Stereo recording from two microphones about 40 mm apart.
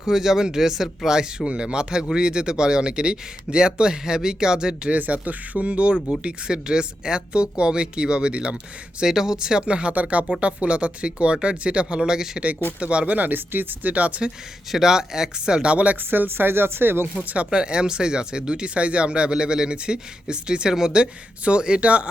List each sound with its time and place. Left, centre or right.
0.1 s speech: centre
4.9 s speech: right
9.0 s speech: centre
12.8 s speech: right
13.1 s speech: right
13.9 s speech: right
14.7 s speech: centre
15.7 s speech: right
16.0 s speech: right
17.2 s speech: right